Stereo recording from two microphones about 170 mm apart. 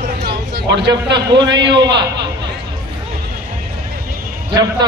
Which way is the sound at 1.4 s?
90° right.